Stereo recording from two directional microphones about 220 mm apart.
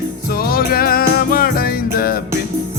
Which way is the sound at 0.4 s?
40° left (ahead or behind).